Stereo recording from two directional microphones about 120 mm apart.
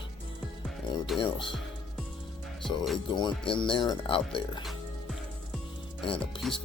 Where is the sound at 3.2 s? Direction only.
45° left (ahead or behind).